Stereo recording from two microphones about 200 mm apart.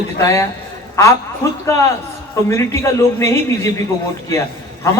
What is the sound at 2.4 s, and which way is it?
A man's voice, 15° left (ahead or behind).